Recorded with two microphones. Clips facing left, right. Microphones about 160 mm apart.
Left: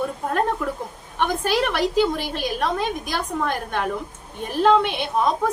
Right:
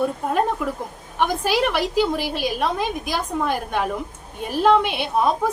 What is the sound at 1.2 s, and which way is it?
A woman's voice, 10° right (ahead or behind).